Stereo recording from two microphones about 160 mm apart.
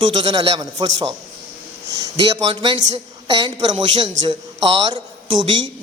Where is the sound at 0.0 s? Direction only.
30° right (ahead or behind).